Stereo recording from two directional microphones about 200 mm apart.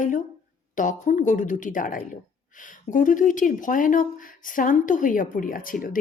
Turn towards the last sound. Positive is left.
turn(degrees=45)  # may be behind; listen again after turning